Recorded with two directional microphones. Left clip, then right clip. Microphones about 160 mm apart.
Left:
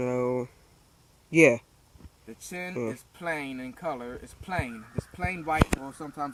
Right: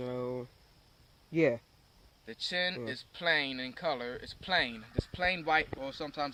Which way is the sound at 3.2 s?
55° right (ahead or behind).